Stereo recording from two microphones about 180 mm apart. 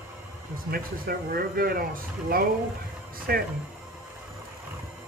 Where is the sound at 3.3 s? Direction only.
60° right (ahead or behind).